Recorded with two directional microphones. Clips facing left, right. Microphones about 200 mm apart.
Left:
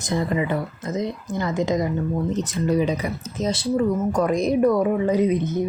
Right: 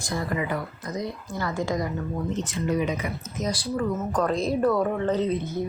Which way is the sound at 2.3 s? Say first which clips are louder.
Left 3 dB; 40° left (ahead or behind).